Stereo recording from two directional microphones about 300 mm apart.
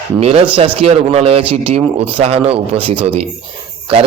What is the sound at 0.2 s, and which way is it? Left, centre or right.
A man's voice, centre.